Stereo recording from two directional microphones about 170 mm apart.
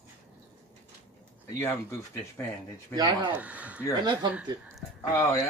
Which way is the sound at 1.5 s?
15° left (ahead or behind).